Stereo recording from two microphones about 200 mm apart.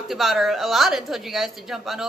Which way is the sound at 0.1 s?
Centre (ahead or behind).